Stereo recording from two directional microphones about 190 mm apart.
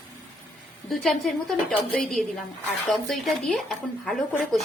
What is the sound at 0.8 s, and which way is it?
A woman's voice, centre (ahead or behind).